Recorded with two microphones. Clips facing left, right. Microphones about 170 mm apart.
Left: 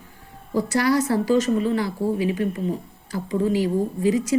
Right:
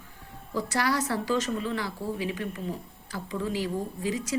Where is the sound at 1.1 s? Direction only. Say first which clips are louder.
Left 8 dB; 50° left (ahead or behind).